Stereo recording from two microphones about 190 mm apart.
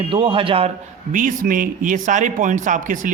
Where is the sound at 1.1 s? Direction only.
45° right (ahead or behind).